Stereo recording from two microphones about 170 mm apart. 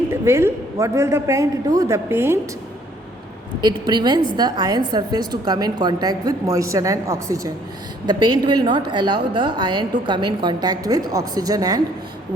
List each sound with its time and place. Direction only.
0.1 s a man's voice: 15° right (ahead or behind)
3.6 s a woman's voice: 25° right (ahead or behind)